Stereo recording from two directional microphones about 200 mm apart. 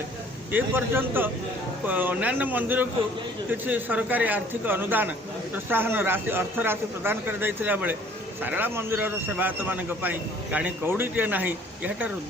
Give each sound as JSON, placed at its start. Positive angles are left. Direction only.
{"t": 0.5, "sound": "a man's voice", "side_deg": -10}